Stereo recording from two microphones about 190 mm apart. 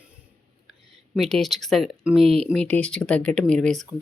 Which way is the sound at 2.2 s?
30° right (ahead or behind).